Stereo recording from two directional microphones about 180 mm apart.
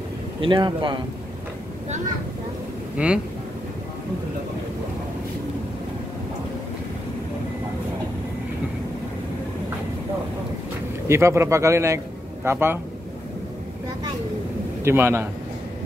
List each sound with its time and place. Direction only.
0.4 s speech: 25° right (ahead or behind)
3.0 s speech: 5° right (ahead or behind)
11.1 s speech: 15° right (ahead or behind)
14.8 s speech: 15° right (ahead or behind)